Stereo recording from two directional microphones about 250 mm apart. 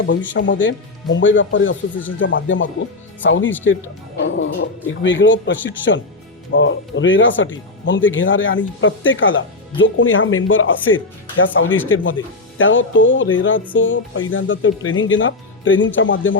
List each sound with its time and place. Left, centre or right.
0.3 s speech: left